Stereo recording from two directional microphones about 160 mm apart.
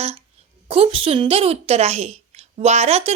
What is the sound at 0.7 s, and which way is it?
A woman's voice, 35° right (ahead or behind).